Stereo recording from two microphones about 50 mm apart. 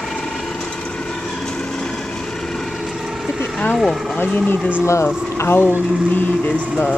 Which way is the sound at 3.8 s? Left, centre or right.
Centre.